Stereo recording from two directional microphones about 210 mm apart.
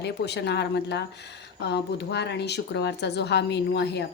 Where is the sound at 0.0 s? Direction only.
55° left (ahead or behind).